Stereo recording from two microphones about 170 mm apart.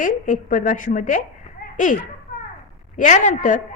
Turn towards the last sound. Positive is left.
turn(degrees=45)  # may be behind; listen again after turning